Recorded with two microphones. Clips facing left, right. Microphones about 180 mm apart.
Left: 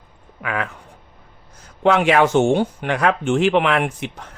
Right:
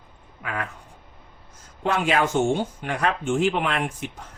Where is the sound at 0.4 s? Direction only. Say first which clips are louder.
Left 6 dB; 75° left (ahead or behind).